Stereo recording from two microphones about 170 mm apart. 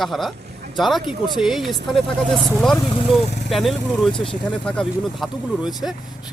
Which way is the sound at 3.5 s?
Centre (ahead or behind).